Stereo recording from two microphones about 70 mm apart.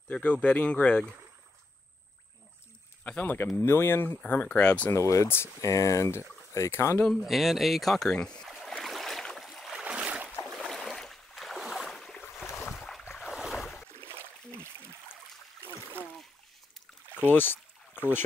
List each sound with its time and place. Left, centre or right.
0.1 s speech: centre
3.0 s a sound: centre
3.6 s speech: left
4.2 s speech: left
4.9 s speech: left
7.1 s speech: centre
8.5 s boat: centre
9.8 s boat: centre
10.7 s boat: centre
14.0 s a sound: right
17.3 s rowboat: left